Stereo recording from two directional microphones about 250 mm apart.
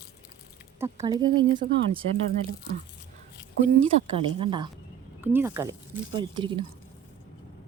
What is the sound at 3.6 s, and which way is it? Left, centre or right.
Speech, right.